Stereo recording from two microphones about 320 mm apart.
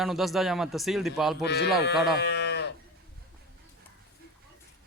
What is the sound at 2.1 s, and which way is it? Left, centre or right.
Livestock, left.